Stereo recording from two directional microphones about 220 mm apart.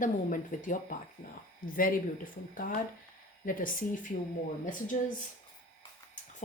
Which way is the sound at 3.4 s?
40° left (ahead or behind).